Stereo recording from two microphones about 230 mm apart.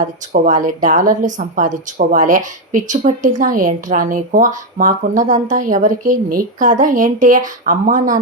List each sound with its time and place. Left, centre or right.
0.0 s speech: right